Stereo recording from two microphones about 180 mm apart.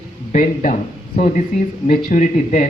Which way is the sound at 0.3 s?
45° left (ahead or behind).